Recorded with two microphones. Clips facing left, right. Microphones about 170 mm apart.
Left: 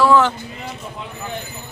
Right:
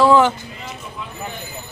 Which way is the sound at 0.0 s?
15° right (ahead or behind).